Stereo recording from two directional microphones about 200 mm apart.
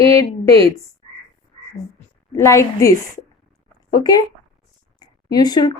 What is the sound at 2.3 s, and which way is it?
Speech, 15° left (ahead or behind).